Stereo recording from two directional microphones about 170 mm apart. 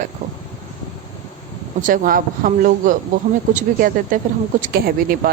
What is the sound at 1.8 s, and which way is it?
Speech, 55° right (ahead or behind).